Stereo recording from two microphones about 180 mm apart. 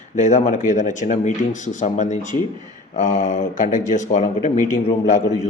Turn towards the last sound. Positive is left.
turn(degrees=40)  # may be behind; listen again after turning